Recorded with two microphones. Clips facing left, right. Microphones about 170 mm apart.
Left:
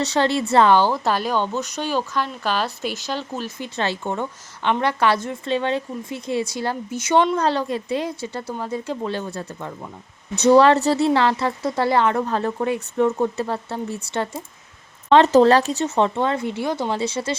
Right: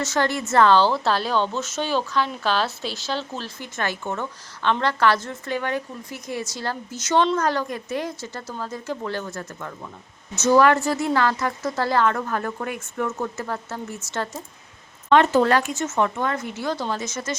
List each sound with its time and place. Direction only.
0.2 s speech: 20° left (ahead or behind)
7.4 s speech: 25° left (ahead or behind)
15.1 s speech: 35° left (ahead or behind)